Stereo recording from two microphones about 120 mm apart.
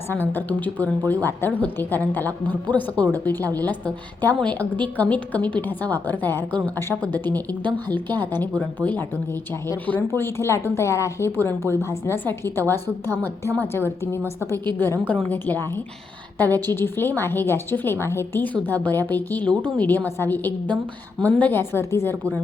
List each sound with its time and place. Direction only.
0.1 s a woman's voice: 15° left (ahead or behind)